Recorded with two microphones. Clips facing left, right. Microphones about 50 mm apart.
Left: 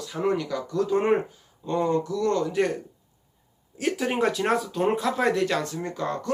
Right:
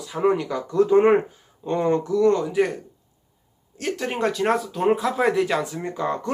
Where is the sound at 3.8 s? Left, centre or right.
Centre.